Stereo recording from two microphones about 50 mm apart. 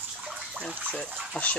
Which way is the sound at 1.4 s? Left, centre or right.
Left.